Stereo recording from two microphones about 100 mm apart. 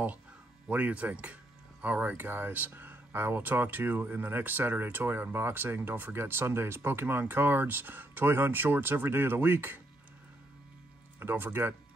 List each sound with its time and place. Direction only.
0.7 s speech: 15° right (ahead or behind)
11.1 s speech: 20° right (ahead or behind)